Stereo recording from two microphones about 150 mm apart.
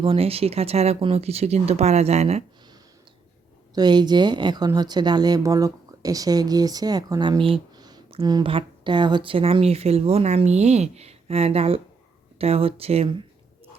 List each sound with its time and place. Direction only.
0.0 s speech: 40° right (ahead or behind)
3.8 s speech: 30° right (ahead or behind)
7.4 s a sound: 30° right (ahead or behind)
8.1 s a woman's voice: 30° right (ahead or behind)